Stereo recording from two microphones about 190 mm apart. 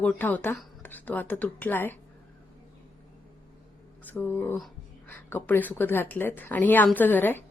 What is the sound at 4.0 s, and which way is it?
Speech, 10° left (ahead or behind).